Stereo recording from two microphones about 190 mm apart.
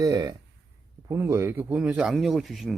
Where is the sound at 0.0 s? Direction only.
20° right (ahead or behind).